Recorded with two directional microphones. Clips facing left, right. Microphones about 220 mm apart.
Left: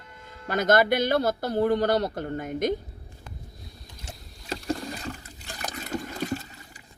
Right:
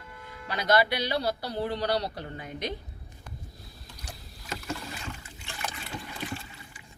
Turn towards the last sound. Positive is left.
turn(degrees=40)  # may be behind; listen again after turning